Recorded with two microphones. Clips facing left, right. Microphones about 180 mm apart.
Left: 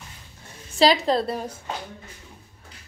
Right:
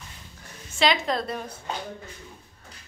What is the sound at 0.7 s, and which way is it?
Speech, 35° left (ahead or behind).